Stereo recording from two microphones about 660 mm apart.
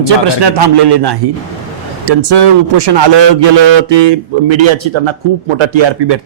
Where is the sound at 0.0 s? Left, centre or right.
Right.